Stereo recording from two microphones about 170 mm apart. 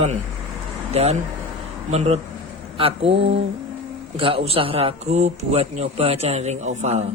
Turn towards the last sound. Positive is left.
turn(degrees=-40)  # may be behind; listen again after turning